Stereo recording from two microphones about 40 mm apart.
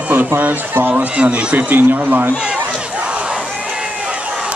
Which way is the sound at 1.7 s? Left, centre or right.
Right.